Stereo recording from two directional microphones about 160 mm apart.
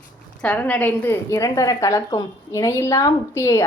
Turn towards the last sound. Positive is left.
turn(degrees=20)  # may be behind; listen again after turning